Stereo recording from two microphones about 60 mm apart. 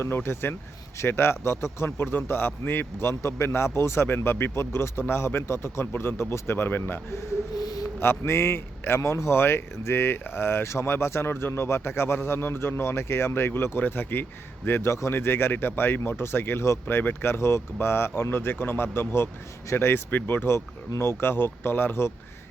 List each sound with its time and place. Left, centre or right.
0.0 s a man's voice: left